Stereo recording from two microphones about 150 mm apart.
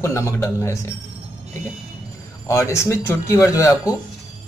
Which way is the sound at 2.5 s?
20° left (ahead or behind).